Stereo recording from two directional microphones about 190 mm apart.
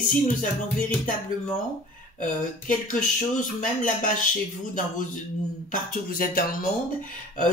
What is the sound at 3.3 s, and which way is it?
Speech, 40° left (ahead or behind).